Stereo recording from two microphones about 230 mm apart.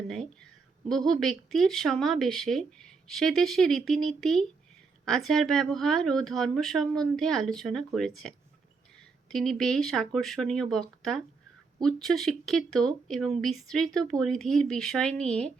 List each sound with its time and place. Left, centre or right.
0.9 s a woman's voice: centre
9.3 s a woman's voice: centre